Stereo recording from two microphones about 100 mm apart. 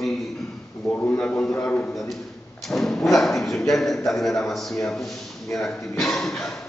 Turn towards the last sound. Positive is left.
turn(degrees=5)  # may be behind; listen again after turning